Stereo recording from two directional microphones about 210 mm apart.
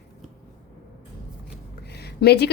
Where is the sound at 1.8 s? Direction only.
50° left (ahead or behind).